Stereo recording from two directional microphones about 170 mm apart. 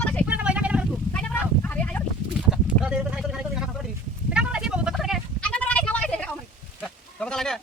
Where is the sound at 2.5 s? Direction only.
5° right (ahead or behind).